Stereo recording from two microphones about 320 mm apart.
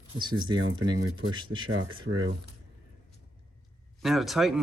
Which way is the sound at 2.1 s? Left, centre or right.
Right.